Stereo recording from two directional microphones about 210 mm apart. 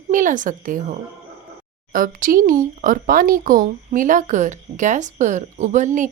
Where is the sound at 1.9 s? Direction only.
40° right (ahead or behind).